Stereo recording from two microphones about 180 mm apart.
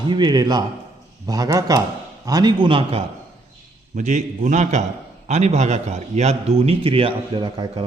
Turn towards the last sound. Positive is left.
turn(degrees=-30)  # may be behind; listen again after turning